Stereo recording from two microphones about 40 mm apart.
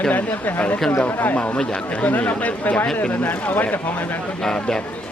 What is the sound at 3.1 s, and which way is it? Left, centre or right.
Speech, left.